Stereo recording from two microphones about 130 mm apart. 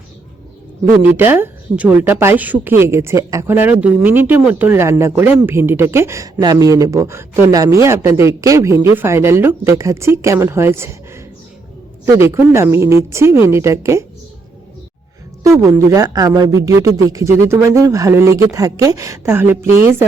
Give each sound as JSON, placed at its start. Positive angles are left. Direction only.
{"t": 1.0, "sound": "a woman's voice", "side_deg": -15}
{"t": 15.4, "sound": "speech", "side_deg": -20}